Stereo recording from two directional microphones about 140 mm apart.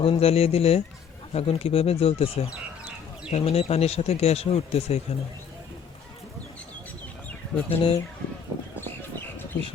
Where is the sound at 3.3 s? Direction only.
45° left (ahead or behind).